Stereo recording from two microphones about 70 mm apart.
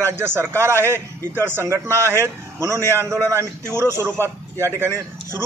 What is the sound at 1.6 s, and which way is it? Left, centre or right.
A man's voice, right.